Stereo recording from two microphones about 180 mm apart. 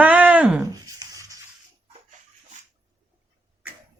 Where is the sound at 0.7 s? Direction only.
20° right (ahead or behind).